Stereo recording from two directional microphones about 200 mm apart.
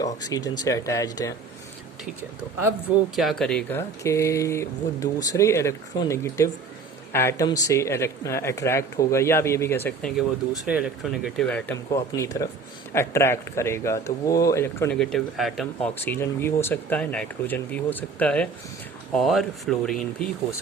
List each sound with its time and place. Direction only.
0.0 s speech: 20° left (ahead or behind)
3.2 s speech: centre (ahead or behind)
10.2 s speech: 5° right (ahead or behind)